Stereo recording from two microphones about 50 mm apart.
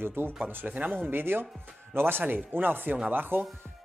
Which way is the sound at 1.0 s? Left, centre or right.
Right.